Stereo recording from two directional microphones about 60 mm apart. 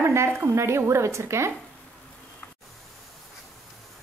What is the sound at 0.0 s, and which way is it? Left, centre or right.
A woman's voice, right.